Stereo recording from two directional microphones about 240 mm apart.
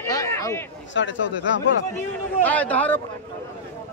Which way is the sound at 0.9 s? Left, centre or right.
Left.